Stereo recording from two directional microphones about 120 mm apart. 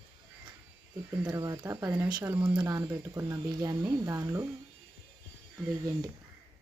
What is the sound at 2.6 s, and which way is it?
Speech, 35° right (ahead or behind).